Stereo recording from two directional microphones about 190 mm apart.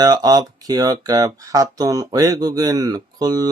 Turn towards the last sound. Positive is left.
turn(degrees=-20)  # may be behind; listen again after turning